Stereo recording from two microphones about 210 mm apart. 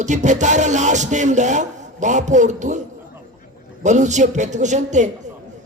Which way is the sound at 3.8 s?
35° right (ahead or behind).